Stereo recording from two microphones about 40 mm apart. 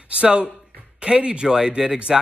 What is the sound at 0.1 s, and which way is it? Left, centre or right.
Speech, right.